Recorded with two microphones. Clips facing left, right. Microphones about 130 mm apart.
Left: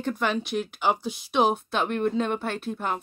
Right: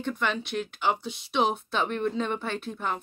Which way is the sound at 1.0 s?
25° right (ahead or behind).